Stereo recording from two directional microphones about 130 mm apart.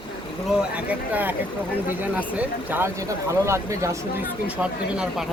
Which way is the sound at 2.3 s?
15° right (ahead or behind).